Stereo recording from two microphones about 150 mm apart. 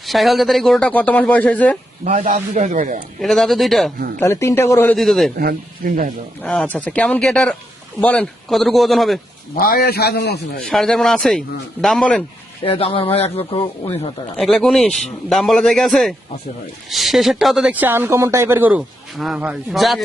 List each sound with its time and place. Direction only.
0.0 s speech: centre (ahead or behind)
2.0 s speech: 55° right (ahead or behind)
3.2 s a man's voice: centre (ahead or behind)
4.2 s speech: 20° left (ahead or behind)
4.9 s a man's voice: centre (ahead or behind)
5.4 s speech: 75° right (ahead or behind)
6.4 s a man's voice: 5° left (ahead or behind)
9.6 s a man's voice: 85° left
10.6 s a man's voice: 5° left (ahead or behind)
12.6 s speech: 35° left (ahead or behind)
14.3 s a man's voice: centre (ahead or behind)